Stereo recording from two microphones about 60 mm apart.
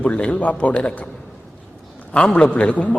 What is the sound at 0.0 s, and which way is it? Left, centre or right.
A man's voice, left.